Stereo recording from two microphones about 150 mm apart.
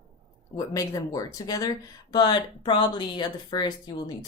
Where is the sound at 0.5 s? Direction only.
20° left (ahead or behind).